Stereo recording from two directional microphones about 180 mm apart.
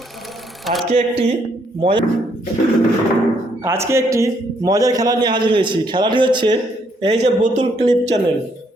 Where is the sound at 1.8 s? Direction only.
25° right (ahead or behind).